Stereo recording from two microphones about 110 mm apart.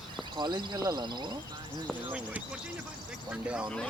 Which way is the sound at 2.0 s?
15° right (ahead or behind).